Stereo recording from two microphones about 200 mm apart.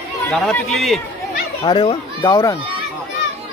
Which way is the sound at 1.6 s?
25° left (ahead or behind).